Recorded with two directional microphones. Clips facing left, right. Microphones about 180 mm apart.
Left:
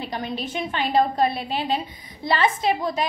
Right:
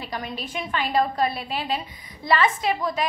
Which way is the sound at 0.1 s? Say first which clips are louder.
Left 1 dB; 25° left (ahead or behind).